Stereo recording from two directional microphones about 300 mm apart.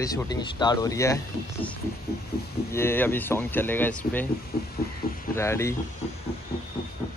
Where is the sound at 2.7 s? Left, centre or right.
Centre.